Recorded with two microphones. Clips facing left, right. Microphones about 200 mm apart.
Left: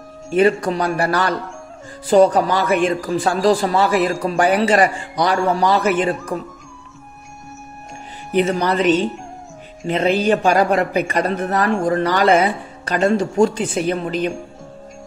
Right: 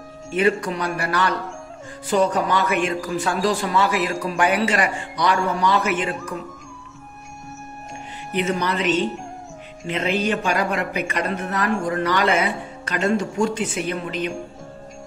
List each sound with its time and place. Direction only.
0.3 s a woman's voice: 35° left (ahead or behind)
8.4 s a woman's voice: 35° left (ahead or behind)